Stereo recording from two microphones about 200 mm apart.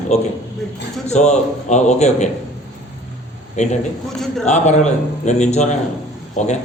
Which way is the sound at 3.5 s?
35° left (ahead or behind).